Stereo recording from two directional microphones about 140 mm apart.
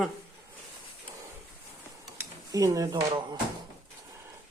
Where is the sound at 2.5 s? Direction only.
25° right (ahead or behind).